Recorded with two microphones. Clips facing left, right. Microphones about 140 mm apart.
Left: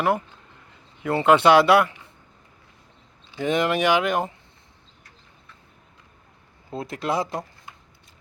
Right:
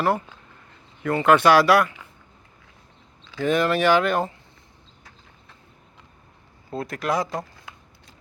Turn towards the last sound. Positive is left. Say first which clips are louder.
# even
turn(degrees=-90)